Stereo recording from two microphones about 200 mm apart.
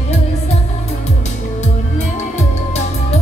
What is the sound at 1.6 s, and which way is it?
Music, 35° left (ahead or behind).